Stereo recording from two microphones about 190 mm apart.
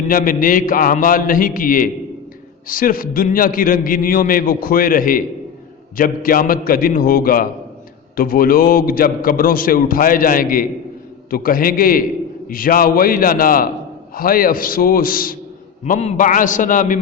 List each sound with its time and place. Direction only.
0.1 s a man's voice: 45° left (ahead or behind)
15.8 s a man's voice: 35° left (ahead or behind)